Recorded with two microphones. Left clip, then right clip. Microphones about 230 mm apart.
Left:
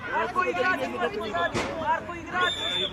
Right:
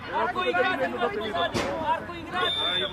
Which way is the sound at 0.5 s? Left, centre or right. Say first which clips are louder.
Right 1 dB; right.